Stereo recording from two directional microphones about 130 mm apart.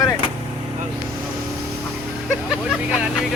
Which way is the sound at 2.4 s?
5° right (ahead or behind).